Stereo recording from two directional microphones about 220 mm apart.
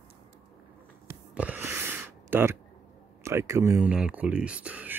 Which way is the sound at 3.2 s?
15° right (ahead or behind).